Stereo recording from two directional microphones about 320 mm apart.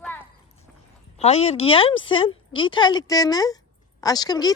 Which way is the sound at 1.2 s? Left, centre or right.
Centre.